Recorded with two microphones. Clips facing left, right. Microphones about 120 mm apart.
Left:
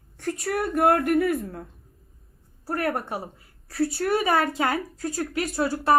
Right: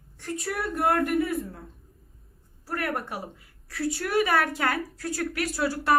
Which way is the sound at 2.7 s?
30° left (ahead or behind).